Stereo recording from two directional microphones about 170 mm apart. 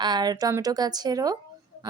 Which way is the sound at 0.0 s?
25° right (ahead or behind).